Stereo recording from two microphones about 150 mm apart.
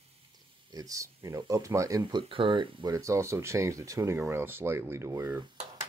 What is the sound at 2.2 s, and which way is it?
Speech, 35° right (ahead or behind).